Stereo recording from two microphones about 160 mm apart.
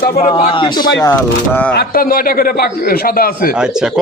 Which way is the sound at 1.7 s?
70° left (ahead or behind).